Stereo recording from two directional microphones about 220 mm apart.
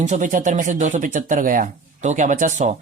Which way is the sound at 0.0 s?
35° right (ahead or behind).